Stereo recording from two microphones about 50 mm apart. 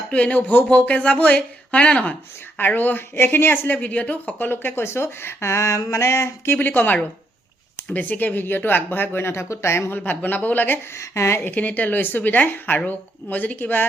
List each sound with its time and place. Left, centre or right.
0.1 s speech: left
2.6 s speech: left
3.8 s speech: left
6.6 s speech: left
10.0 s speech: left
10.9 s speech: left
11.4 s speech: left